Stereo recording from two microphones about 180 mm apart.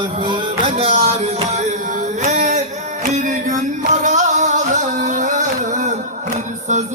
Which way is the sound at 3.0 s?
45° right (ahead or behind).